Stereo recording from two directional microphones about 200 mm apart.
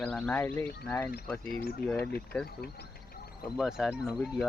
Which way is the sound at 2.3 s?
Centre (ahead or behind).